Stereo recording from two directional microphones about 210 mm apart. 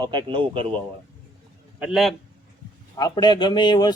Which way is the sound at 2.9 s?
20° left (ahead or behind).